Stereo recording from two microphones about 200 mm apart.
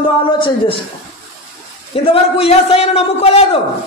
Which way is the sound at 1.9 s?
30° left (ahead or behind).